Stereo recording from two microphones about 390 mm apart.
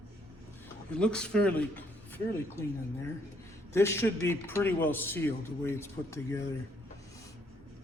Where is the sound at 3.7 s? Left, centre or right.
Centre.